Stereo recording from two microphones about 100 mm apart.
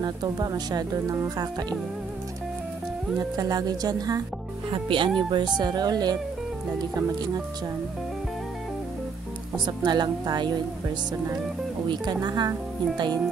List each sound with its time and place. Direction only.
0.0 s speech: 40° right (ahead or behind)
3.2 s speech: 40° right (ahead or behind)
4.6 s speech: 60° right (ahead or behind); by 7.4 s 40° right (ahead or behind)
9.7 s speech: 45° right (ahead or behind)
11.9 s speech: 45° right (ahead or behind)